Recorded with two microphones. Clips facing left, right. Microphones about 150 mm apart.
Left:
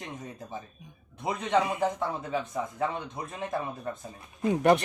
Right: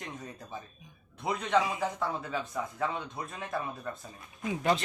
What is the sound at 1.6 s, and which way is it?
Speech, 55° left (ahead or behind).